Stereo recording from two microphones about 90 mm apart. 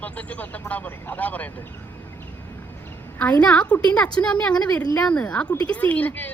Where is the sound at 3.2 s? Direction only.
15° left (ahead or behind).